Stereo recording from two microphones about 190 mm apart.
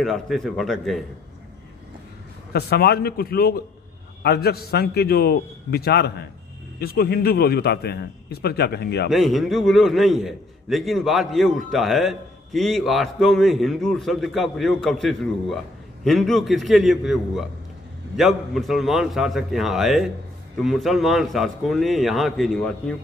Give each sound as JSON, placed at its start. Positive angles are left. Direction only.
{"t": 0.0, "sound": "a man's voice", "side_deg": 0}
{"t": 2.5, "sound": "a man's voice", "side_deg": 55}
{"t": 9.1, "sound": "a man's voice", "side_deg": 0}